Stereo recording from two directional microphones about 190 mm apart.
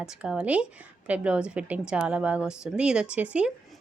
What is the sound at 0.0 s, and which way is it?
A woman's voice, 5° right (ahead or behind).